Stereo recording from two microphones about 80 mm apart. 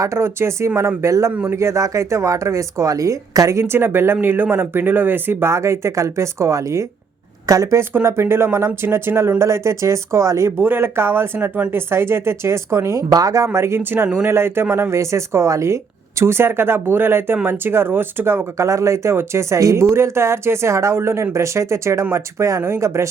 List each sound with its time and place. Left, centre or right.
0.0 s speech: right
10.6 s speech: right